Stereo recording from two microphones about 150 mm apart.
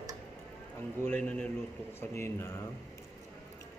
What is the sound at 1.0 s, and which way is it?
Speech, 10° left (ahead or behind).